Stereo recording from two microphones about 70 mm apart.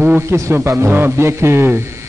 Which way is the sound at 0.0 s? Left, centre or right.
Right.